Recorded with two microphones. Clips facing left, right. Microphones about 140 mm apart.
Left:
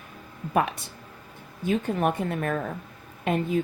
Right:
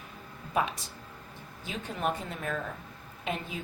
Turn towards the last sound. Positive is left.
turn(degrees=55)  # may be behind; listen again after turning